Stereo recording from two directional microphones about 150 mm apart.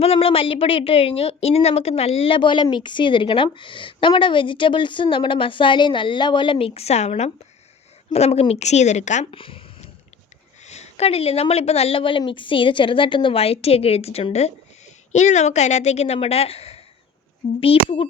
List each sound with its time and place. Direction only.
0.0 s speech: 40° left (ahead or behind)
9.3 s a sound: 35° left (ahead or behind)
10.6 s speech: 50° left (ahead or behind)